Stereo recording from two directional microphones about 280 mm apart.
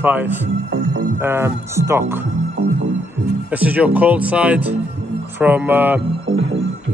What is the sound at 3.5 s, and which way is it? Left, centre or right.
A man's voice, centre.